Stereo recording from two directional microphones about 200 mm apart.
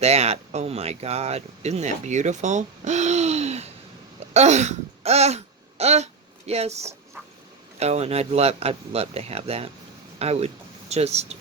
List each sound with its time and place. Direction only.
0.0 s speech: 30° right (ahead or behind)
4.2 s throat clearing: 35° right (ahead or behind)
6.5 s speech: 30° right (ahead or behind)